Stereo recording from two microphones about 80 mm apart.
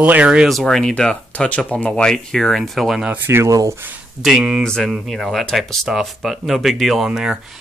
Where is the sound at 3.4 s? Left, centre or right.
Right.